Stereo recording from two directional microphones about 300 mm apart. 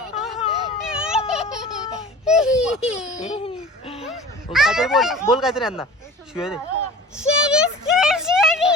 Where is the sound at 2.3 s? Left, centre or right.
Centre.